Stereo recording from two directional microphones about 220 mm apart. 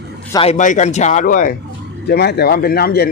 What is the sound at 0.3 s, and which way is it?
A man's voice, 30° left (ahead or behind).